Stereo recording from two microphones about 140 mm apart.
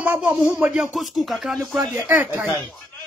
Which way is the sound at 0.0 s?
10° right (ahead or behind).